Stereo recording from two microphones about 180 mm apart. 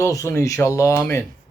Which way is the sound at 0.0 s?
15° left (ahead or behind).